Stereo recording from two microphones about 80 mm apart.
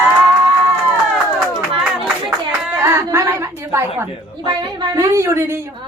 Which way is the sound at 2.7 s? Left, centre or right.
Right.